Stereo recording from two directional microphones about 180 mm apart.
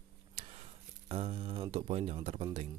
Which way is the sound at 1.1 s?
35° right (ahead or behind).